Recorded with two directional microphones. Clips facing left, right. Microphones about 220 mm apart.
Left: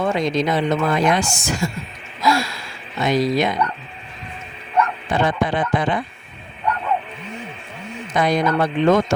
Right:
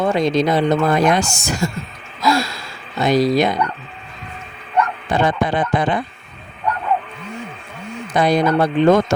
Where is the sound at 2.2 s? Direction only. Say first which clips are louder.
Right 2 dB; 40° right (ahead or behind).